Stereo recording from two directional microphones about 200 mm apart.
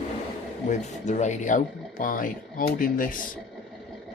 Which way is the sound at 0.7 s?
35° left (ahead or behind).